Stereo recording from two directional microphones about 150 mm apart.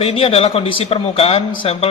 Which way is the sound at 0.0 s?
40° left (ahead or behind).